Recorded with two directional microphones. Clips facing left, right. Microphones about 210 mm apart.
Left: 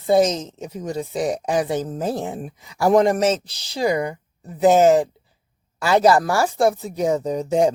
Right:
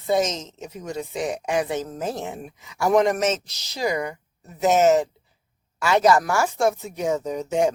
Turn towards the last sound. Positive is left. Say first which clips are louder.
# left 3 dB
turn(degrees=35)  # may be behind; listen again after turning